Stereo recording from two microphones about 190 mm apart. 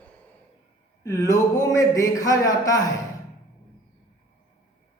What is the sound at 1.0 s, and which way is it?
Speech, 20° left (ahead or behind).